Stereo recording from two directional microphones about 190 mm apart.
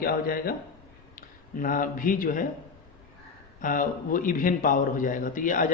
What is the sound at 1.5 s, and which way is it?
Speech, 45° left (ahead or behind).